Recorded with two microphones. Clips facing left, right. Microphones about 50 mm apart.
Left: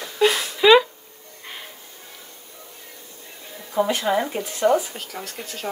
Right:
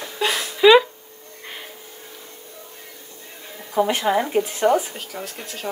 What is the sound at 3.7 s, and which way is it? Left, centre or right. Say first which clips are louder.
Speech: right 2 dB; right.